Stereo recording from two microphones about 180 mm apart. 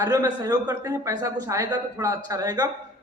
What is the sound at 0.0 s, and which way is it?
A man's voice, 20° right (ahead or behind).